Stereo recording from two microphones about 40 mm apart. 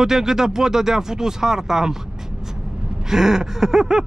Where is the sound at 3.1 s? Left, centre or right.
Centre.